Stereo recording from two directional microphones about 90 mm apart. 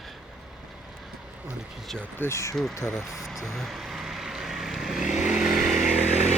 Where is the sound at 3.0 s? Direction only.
Centre (ahead or behind).